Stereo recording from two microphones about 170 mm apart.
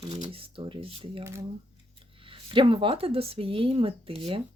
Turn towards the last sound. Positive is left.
turn(degrees=-35)  # may be behind; listen again after turning